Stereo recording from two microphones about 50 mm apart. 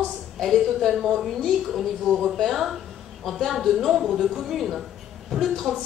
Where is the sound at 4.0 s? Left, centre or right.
Centre.